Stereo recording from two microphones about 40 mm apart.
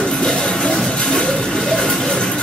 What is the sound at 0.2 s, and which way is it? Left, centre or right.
Music, centre.